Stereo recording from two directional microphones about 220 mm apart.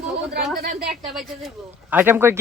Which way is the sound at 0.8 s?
Centre (ahead or behind).